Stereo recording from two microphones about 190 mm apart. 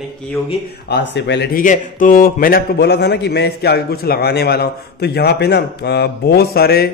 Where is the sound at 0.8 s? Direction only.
65° left (ahead or behind).